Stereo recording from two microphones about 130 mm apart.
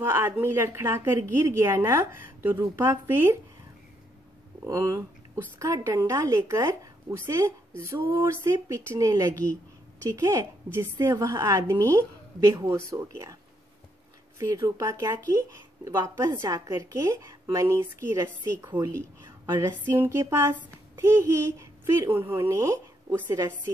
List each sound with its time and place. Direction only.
0.0 s a woman's voice: 20° right (ahead or behind)
4.6 s a woman's voice: 25° right (ahead or behind)
14.4 s a woman's voice: 25° right (ahead or behind)
19.2 s a sound: 25° right (ahead or behind)
19.9 s a child's voice: 20° right (ahead or behind)